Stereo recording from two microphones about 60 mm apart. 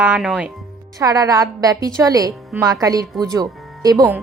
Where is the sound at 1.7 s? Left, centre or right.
Right.